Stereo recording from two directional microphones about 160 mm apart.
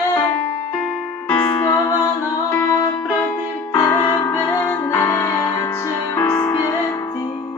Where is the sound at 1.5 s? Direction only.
25° left (ahead or behind).